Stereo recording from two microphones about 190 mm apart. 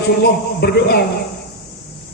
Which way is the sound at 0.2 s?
55° left (ahead or behind).